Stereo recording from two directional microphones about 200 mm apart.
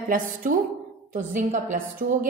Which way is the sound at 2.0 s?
45° right (ahead or behind).